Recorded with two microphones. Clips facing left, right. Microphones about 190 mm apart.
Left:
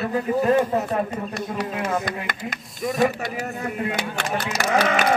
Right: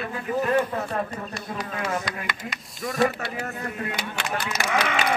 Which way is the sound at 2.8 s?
20° left (ahead or behind).